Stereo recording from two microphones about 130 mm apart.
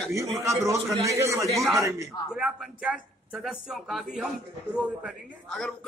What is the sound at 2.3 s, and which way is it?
Speech, 5° right (ahead or behind).